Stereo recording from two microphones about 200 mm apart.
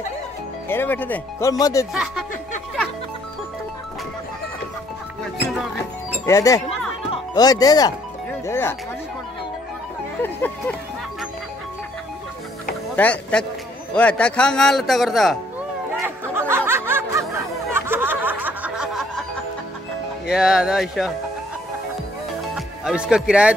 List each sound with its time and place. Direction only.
0.7 s speech: 10° left (ahead or behind)
6.2 s speech: 15° left (ahead or behind)
10.2 s speech: 10° left (ahead or behind)
12.9 s speech: 5° left (ahead or behind)
16.3 s snicker: 10° right (ahead or behind)
20.2 s speech: 5° right (ahead or behind)
22.8 s speech: 5° right (ahead or behind)